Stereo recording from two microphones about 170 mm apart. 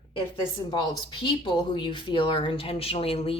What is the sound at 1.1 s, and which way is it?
A woman's voice, 30° left (ahead or behind).